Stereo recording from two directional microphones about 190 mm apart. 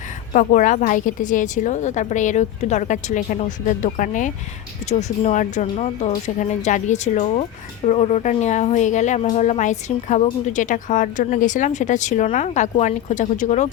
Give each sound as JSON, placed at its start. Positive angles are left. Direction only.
{"t": 0.3, "sound": "a woman's voice", "side_deg": 45}